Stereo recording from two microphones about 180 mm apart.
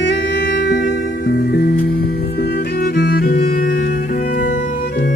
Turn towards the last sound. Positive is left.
turn(degrees=55)  # may be behind; listen again after turning